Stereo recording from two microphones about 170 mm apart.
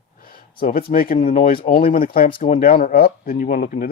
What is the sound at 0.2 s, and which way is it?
Speech, 55° left (ahead or behind).